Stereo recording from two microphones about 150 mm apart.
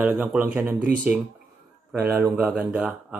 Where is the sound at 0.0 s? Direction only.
10° right (ahead or behind).